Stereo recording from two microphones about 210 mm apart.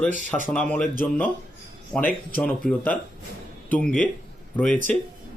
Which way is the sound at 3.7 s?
5° left (ahead or behind).